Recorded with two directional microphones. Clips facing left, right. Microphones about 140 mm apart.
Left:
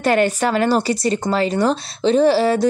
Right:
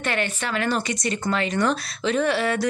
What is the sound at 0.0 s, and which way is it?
A woman's voice, 40° left (ahead or behind).